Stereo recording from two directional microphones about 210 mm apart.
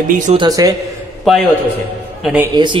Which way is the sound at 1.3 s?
Centre (ahead or behind).